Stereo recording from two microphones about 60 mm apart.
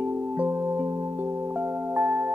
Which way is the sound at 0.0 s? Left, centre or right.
Right.